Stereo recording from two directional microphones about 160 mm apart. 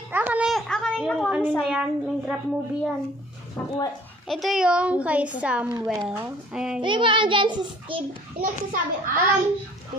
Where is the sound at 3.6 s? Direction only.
15° left (ahead or behind).